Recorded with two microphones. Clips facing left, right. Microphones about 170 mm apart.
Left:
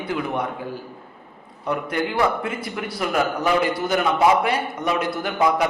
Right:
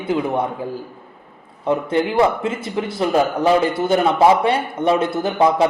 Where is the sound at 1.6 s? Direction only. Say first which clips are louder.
Right 6 dB; 25° right (ahead or behind).